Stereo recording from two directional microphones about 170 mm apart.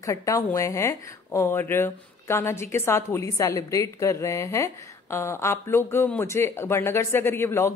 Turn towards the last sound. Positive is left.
turn(degrees=15)  # may be behind; listen again after turning